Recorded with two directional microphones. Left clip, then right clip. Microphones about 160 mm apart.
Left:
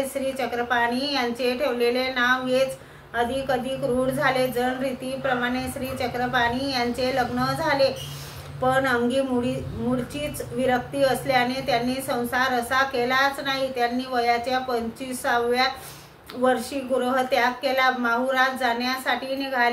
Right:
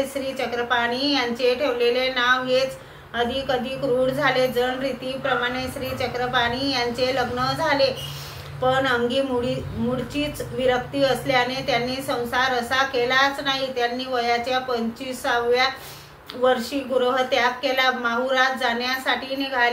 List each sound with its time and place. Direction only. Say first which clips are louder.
0.4 s a woman's voice: right 1 dB; 25° left (ahead or behind)
4.0 s a woman's voice: right 2 dB; 25° left (ahead or behind)
10.6 s a woman's voice: right 1 dB; 25° left (ahead or behind)